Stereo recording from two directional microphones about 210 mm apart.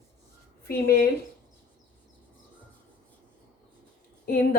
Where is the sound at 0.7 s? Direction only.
50° left (ahead or behind).